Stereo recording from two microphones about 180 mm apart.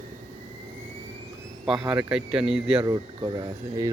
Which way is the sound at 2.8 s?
25° right (ahead or behind).